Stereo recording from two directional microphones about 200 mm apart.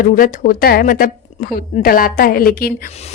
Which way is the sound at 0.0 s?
40° left (ahead or behind).